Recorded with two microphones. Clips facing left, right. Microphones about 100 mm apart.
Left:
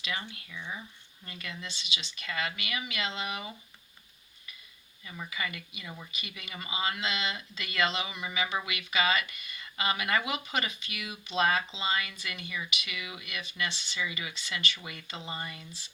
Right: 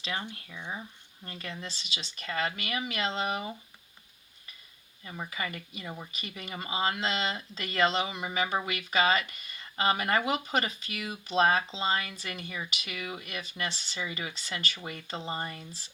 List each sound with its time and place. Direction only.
0.7 s speech: 35° right (ahead or behind)
5.0 s speech: 35° right (ahead or behind)